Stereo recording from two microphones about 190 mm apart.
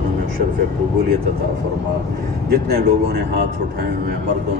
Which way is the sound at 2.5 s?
55° right (ahead or behind).